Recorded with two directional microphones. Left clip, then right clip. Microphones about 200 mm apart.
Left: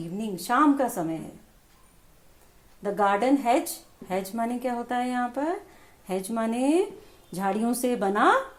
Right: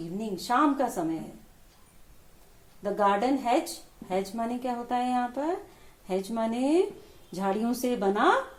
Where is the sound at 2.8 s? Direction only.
40° left (ahead or behind).